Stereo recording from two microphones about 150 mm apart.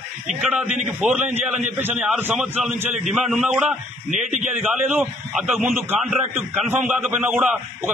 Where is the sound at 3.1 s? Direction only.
Centre (ahead or behind).